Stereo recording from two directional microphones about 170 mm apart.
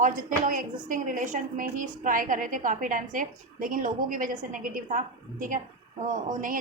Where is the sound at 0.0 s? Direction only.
55° right (ahead or behind).